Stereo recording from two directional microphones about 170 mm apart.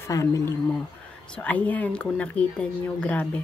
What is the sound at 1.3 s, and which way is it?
A woman's voice, 10° left (ahead or behind).